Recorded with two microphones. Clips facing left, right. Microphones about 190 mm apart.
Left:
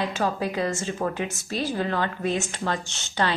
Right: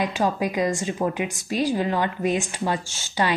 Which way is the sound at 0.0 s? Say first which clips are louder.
Right 3 dB; 15° right (ahead or behind).